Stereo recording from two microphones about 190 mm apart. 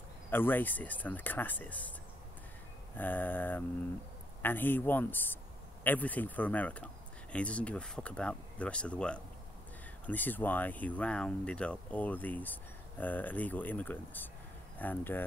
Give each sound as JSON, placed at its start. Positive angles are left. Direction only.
{"t": 0.3, "sound": "speech", "side_deg": 10}
{"t": 3.0, "sound": "speech", "side_deg": 10}